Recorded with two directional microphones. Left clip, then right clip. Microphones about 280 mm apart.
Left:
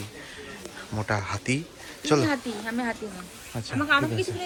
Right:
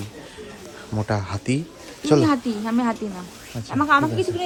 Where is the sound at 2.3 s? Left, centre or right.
Right.